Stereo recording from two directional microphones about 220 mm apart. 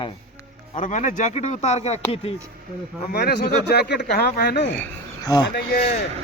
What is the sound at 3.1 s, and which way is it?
Speech, 45° left (ahead or behind).